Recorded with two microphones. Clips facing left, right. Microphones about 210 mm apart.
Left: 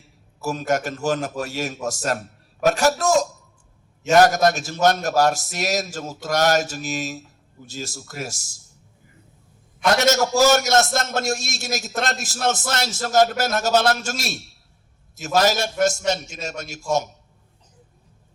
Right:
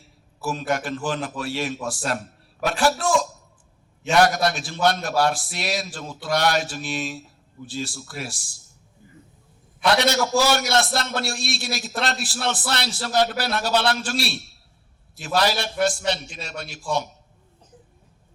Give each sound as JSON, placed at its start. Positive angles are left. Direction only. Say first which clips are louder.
{"t": 0.4, "sound": "a man's voice", "louder": "left 2 dB", "side_deg": 45}
{"t": 9.8, "sound": "a man's voice", "louder": "left 2 dB", "side_deg": 45}